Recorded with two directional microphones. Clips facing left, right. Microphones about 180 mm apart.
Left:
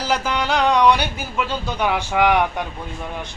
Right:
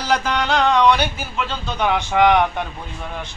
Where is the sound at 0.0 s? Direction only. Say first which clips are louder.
Right 1 dB; 5° left (ahead or behind).